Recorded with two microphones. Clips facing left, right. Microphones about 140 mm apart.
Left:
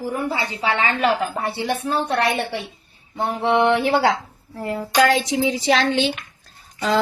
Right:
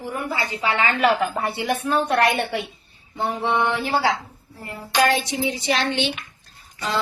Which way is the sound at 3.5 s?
70° left (ahead or behind).